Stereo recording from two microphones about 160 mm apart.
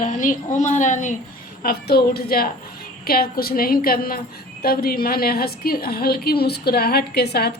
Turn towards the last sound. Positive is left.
turn(degrees=90)